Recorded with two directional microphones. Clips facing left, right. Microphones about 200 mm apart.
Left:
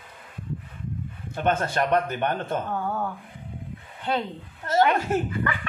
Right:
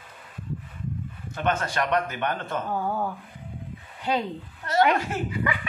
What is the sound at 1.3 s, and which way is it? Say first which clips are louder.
Speech: left 2 dB; 55° left (ahead or behind).